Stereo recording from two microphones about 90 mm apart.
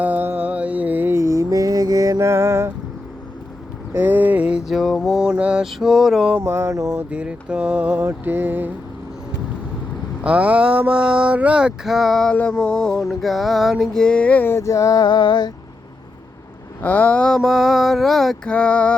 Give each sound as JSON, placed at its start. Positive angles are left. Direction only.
{"t": 0.0, "sound": "mantra", "side_deg": -20}
{"t": 3.9, "sound": "mantra", "side_deg": -20}
{"t": 6.4, "sound": "a sound", "side_deg": -30}
{"t": 7.1, "sound": "mantra", "side_deg": -15}
{"t": 10.2, "sound": "a sound", "side_deg": -15}
{"t": 12.4, "sound": "mantra", "side_deg": 10}
{"t": 14.6, "sound": "music", "side_deg": 40}
{"t": 16.8, "sound": "speech", "side_deg": 20}
{"t": 17.3, "sound": "mantra", "side_deg": 0}
{"t": 18.5, "sound": "mantra", "side_deg": 15}